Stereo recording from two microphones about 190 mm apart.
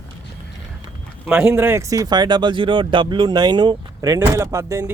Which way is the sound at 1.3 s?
5° right (ahead or behind).